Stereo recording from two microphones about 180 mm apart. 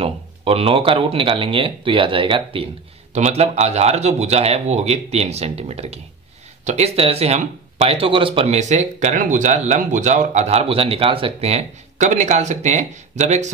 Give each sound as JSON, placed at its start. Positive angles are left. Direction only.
{"t": 0.0, "sound": "speech", "side_deg": -30}